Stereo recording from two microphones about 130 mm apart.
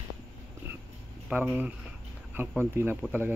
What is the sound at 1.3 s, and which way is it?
Speech, 10° right (ahead or behind).